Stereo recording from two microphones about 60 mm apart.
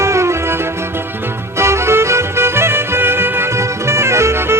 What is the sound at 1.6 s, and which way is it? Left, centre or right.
Music, right.